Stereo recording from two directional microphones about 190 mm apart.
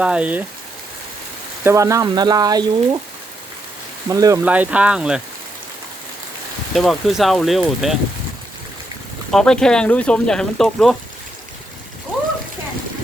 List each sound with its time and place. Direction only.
0.0 s speech: 5° right (ahead or behind)
1.6 s speech: 15° right (ahead or behind)
4.1 s speech: 20° right (ahead or behind)
4.4 s speech: 10° right (ahead or behind)
6.7 s speech: centre (ahead or behind)
9.3 s speech: 5° left (ahead or behind)